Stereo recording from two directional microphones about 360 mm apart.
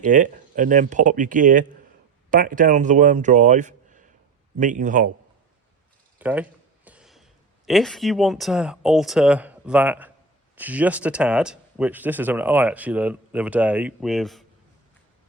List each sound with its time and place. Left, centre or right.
0.0 s a man's voice: right
6.1 s speech: centre